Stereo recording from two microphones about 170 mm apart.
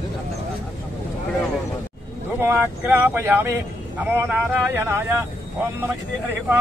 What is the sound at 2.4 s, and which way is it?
Speech, 10° right (ahead or behind).